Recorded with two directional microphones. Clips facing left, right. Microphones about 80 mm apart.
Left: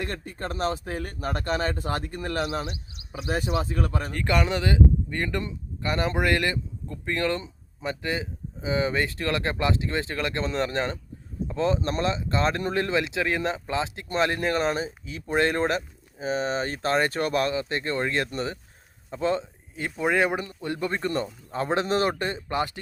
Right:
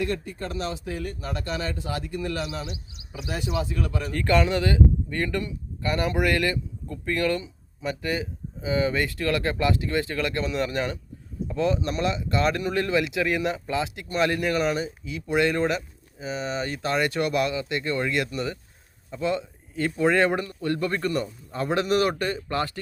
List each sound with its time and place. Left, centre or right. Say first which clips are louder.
0.0 s speech: right 4 dB; left
4.1 s speech: right 4 dB; centre
19.7 s speech: right 3 dB; centre